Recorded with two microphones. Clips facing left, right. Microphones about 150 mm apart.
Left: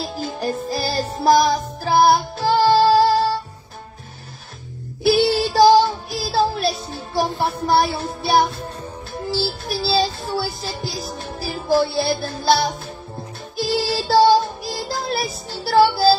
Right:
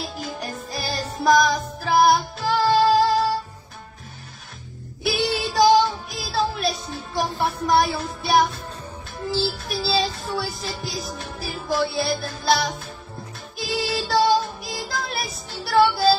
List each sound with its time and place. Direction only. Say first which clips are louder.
0.0 s music: left 6 dB; 30° left (ahead or behind)
2.0 s child singing: left 2 dB; 30° left (ahead or behind)
5.0 s child singing: left 7 dB; 35° left (ahead or behind)
7.3 s music: even; 30° left (ahead or behind)